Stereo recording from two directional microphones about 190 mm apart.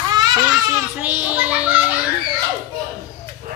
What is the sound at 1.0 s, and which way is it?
Speech, 5° right (ahead or behind).